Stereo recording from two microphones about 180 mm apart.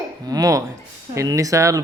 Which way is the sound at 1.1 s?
15° right (ahead or behind).